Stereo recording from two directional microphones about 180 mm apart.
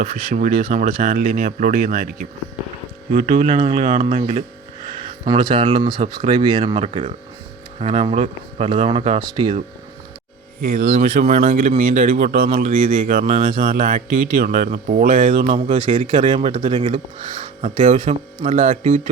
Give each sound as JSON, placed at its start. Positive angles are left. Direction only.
{"t": 0.0, "sound": "speech", "side_deg": -40}
{"t": 3.1, "sound": "speech", "side_deg": -40}
{"t": 5.0, "sound": "speech", "side_deg": -25}
{"t": 10.6, "sound": "speech", "side_deg": -60}
{"t": 10.8, "sound": "speech", "side_deg": -40}
{"t": 13.0, "sound": "speech", "side_deg": -55}
{"t": 13.2, "sound": "speech", "side_deg": -35}
{"t": 13.7, "sound": "speech", "side_deg": -55}
{"t": 15.4, "sound": "speech", "side_deg": -30}